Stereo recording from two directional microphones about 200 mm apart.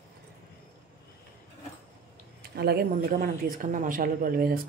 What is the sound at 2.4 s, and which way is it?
Speech, 50° right (ahead or behind).